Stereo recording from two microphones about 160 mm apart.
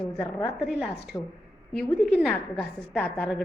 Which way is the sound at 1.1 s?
15° left (ahead or behind).